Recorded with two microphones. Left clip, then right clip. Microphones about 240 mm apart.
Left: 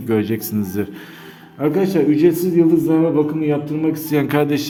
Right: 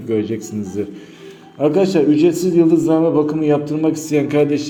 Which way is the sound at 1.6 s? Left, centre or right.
Centre.